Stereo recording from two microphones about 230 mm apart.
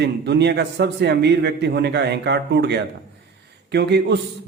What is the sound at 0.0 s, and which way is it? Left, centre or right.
A man's voice, right.